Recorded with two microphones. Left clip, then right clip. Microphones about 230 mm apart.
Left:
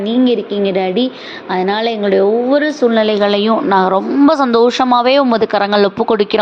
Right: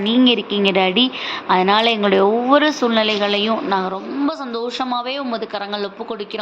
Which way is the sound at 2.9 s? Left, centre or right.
Left.